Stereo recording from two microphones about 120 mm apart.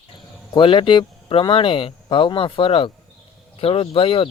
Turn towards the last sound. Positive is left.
turn(degrees=50)  # may be behind; listen again after turning